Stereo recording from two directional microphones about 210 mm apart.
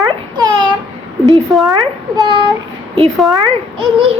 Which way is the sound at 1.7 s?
15° right (ahead or behind).